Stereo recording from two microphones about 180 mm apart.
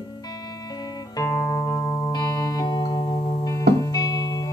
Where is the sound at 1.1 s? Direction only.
15° left (ahead or behind).